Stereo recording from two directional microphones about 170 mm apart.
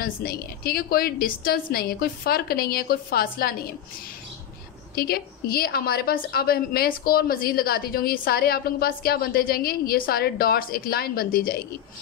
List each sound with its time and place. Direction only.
0.0 s a woman's voice: 65° left (ahead or behind)
4.9 s a woman's voice: 65° left (ahead or behind)